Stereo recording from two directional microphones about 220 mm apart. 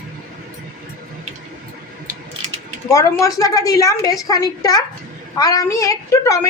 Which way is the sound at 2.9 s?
15° left (ahead or behind).